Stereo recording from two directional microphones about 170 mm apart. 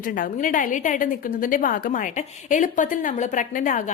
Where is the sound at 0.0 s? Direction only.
55° left (ahead or behind).